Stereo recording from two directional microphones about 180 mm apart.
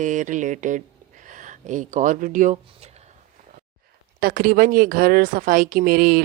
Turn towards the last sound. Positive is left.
turn(degrees=-55)  # may be behind; listen again after turning